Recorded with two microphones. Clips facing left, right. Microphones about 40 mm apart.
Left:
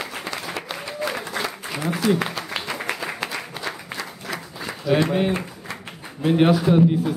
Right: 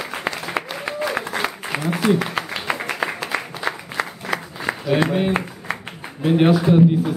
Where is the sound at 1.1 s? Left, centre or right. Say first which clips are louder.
Right 4 dB; right.